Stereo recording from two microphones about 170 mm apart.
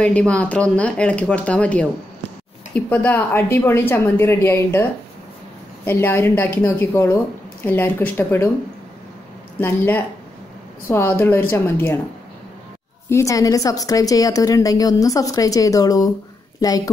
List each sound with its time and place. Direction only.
0.0 s a woman's voice: 5° left (ahead or behind)
5.9 s a woman's voice: 10° left (ahead or behind)
9.6 s a woman's voice: 10° left (ahead or behind)
13.1 s a woman's voice: 20° left (ahead or behind)